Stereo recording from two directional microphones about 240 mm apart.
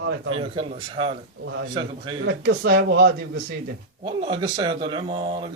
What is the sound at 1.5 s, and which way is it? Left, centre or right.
Speech, right.